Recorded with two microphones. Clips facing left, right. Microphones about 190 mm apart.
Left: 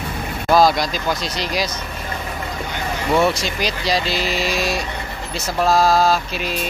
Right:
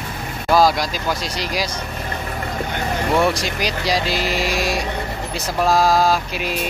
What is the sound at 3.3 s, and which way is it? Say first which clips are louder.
Mantra: even; 15° right (ahead or behind).